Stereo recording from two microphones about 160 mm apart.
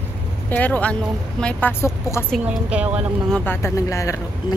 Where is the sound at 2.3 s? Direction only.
5° right (ahead or behind).